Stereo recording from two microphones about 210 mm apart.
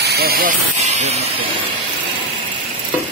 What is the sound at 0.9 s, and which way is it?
Speech, 30° right (ahead or behind).